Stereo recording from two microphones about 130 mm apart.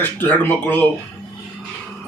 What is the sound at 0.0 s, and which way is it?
Speech, 15° left (ahead or behind).